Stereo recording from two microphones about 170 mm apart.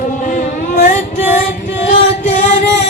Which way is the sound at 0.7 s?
45° left (ahead or behind).